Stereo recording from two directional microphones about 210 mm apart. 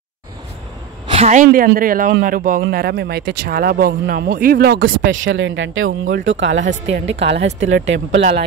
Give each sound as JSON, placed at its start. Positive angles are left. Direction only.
{"t": 1.0, "sound": "a woman's voice", "side_deg": -30}
{"t": 4.7, "sound": "speech", "side_deg": -65}
{"t": 6.7, "sound": "a woman's voice", "side_deg": -30}
{"t": 7.2, "sound": "speech", "side_deg": -55}
{"t": 7.6, "sound": "speech", "side_deg": -65}
{"t": 8.2, "sound": "a woman's voice", "side_deg": -35}